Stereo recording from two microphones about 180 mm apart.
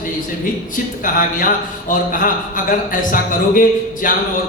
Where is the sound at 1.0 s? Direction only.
50° left (ahead or behind).